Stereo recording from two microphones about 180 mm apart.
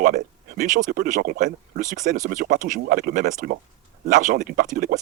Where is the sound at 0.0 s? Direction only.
50° right (ahead or behind).